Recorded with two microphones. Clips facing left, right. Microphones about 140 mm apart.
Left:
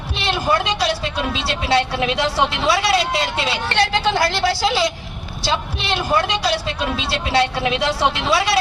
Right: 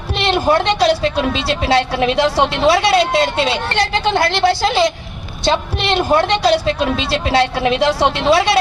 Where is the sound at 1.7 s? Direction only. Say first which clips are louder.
Right 3 dB; 55° right (ahead or behind).